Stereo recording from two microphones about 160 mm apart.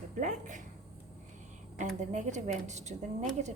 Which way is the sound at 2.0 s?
50° right (ahead or behind).